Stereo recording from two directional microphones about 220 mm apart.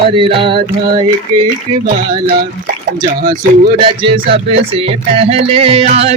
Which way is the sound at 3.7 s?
20° right (ahead or behind).